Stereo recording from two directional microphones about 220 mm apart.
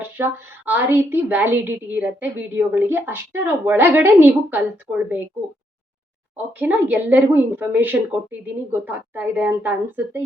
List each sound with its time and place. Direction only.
0.0 s a woman's voice: 10° right (ahead or behind)
6.3 s a woman's voice: 10° right (ahead or behind)